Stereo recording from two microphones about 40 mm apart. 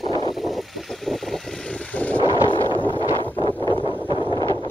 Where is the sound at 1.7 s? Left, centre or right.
Left.